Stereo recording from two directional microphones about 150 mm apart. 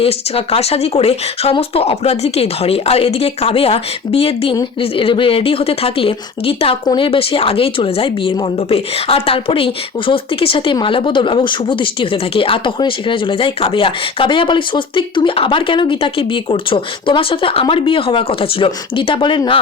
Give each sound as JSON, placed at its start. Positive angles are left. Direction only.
{"t": 0.0, "sound": "a woman's voice", "side_deg": 40}